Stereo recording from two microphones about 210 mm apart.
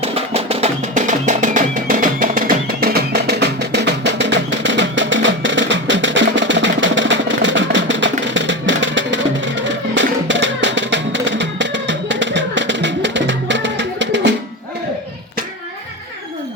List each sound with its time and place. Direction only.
0.0 s music: 30° right (ahead or behind); by 14.3 s 55° right (ahead or behind)